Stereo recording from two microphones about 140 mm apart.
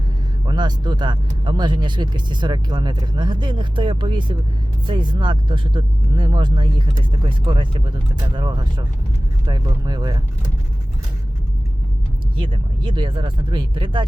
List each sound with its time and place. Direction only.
0.4 s speech: 30° right (ahead or behind)
12.4 s speech: 35° right (ahead or behind)